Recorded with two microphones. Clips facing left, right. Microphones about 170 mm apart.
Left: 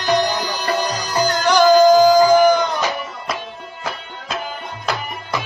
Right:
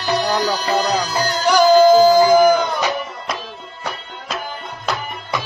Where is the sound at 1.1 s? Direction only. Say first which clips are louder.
Left 2 dB; 10° left (ahead or behind).